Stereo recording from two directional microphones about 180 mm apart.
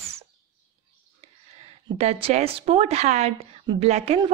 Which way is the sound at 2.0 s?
35° right (ahead or behind).